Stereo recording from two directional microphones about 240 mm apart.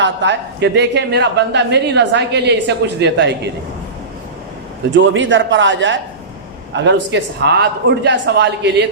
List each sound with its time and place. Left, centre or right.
0.0 s a woman's voice: right
4.9 s a woman's voice: right